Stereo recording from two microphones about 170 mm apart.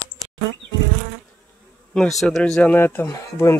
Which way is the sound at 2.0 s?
Centre (ahead or behind).